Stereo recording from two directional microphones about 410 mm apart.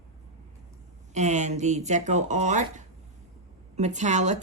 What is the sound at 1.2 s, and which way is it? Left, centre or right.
A woman's voice, centre.